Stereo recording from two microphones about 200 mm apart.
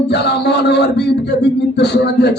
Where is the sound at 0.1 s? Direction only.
55° left (ahead or behind).